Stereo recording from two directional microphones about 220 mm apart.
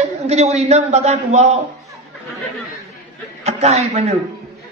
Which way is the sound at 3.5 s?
30° right (ahead or behind).